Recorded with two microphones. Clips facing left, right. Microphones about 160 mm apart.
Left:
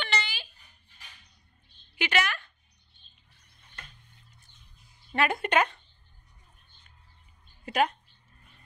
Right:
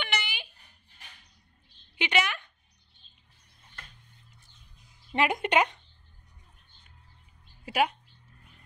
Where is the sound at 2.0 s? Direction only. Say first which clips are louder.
Even; 20° right (ahead or behind).